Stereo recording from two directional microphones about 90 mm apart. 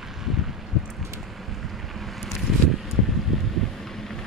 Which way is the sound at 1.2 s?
Centre (ahead or behind).